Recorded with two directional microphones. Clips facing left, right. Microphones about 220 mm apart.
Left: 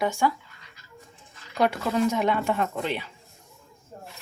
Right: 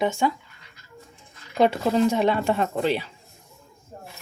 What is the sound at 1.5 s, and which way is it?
Speech, 25° right (ahead or behind).